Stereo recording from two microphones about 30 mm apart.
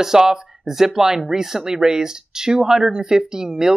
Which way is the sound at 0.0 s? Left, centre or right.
Centre.